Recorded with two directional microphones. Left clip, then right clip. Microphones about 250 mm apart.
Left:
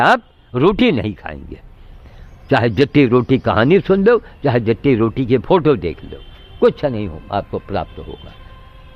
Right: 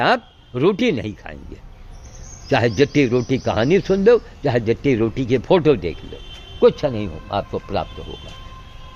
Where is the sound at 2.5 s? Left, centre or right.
Left.